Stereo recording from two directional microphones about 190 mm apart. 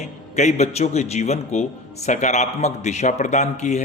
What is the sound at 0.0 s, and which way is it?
Speech, 35° left (ahead or behind).